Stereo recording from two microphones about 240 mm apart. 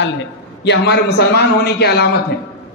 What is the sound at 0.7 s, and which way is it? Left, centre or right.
A man's voice, left.